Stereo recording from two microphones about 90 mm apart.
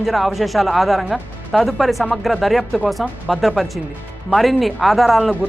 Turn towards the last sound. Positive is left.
turn(degrees=0)  # may be behind; listen again after turning